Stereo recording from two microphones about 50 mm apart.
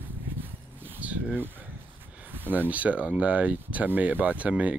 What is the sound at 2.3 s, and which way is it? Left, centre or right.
Speech, right.